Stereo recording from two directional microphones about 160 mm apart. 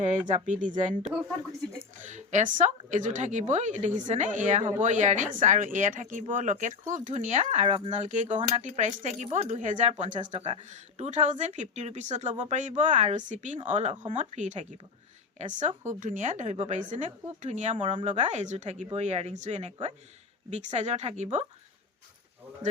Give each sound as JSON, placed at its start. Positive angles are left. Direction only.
{"t": 0.0, "sound": "a woman's voice", "side_deg": -50}